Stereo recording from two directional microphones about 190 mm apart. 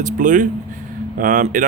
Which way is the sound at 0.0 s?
45° right (ahead or behind).